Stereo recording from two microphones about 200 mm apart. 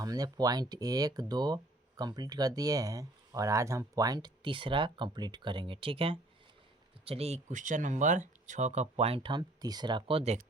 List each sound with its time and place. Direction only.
0.0 s speech: 20° right (ahead or behind)